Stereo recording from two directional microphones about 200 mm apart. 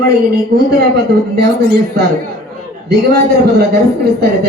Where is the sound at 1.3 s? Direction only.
50° right (ahead or behind).